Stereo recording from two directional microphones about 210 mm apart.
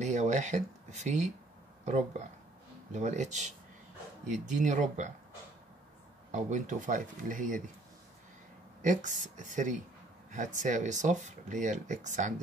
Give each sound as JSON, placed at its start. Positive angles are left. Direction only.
{"t": 0.0, "sound": "speech", "side_deg": -35}
{"t": 2.9, "sound": "speech", "side_deg": -35}
{"t": 6.3, "sound": "speech", "side_deg": -35}
{"t": 8.8, "sound": "speech", "side_deg": -35}